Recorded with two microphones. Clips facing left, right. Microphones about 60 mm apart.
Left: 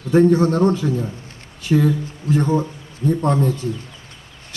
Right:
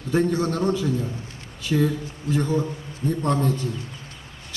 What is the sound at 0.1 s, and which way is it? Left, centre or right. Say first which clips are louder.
Speech: left 8 dB; left.